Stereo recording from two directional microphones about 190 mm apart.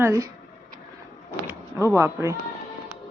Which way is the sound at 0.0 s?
15° right (ahead or behind).